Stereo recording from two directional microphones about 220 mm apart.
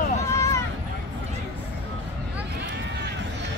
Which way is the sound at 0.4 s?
15° left (ahead or behind).